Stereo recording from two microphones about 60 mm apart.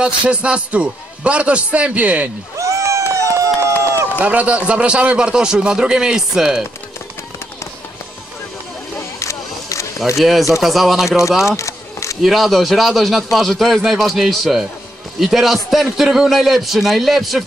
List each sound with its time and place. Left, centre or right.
0.0 s a man's voice: centre
2.5 s cat: right
4.2 s a man's voice: right; by 6.6 s centre
9.2 s a sound: left
10.1 s a man's voice: centre
11.1 s speech: left
11.4 s a sound: left
12.2 s a man's voice: centre